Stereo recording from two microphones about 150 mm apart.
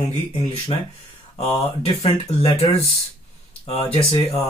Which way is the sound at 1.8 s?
40° left (ahead or behind).